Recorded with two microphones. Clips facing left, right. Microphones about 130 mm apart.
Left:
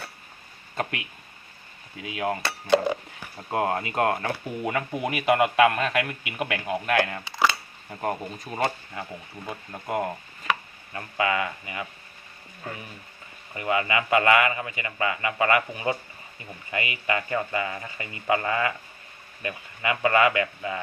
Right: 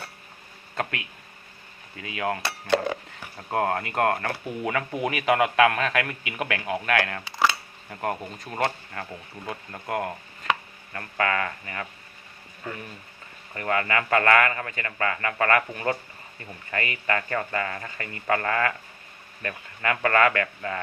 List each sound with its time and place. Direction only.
0.8 s a man's voice: 20° left (ahead or behind)
2.4 s speech: centre (ahead or behind)
3.5 s a man's voice: 20° left (ahead or behind)
7.3 s coin: 5° right (ahead or behind)
8.1 s a man's voice: 5° left (ahead or behind)
13.5 s a man's voice: 15° left (ahead or behind)